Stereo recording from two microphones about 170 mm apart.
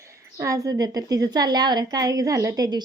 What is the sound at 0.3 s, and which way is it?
A woman's voice, 20° right (ahead or behind).